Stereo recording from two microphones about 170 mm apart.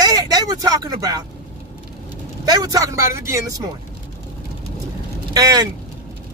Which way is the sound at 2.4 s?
20° right (ahead or behind).